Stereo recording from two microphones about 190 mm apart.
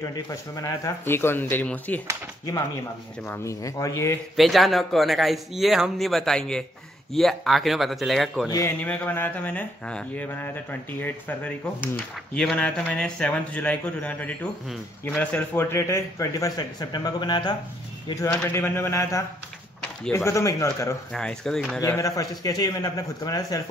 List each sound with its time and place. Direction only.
0.0 s speech: 20° left (ahead or behind)
3.3 s speech: 15° left (ahead or behind)
4.4 s speech: centre (ahead or behind)
8.5 s speech: 15° left (ahead or behind)
21.1 s speech: 5° left (ahead or behind)
21.8 s a man's voice: 15° left (ahead or behind)